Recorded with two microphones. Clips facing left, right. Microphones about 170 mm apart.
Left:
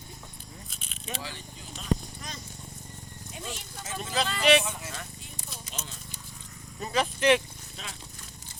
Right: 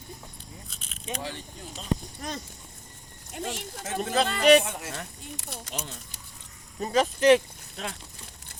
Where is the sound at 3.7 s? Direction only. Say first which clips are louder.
Right 5 dB; 50° right (ahead or behind).